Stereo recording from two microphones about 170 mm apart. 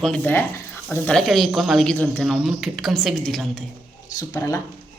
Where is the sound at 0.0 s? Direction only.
10° left (ahead or behind).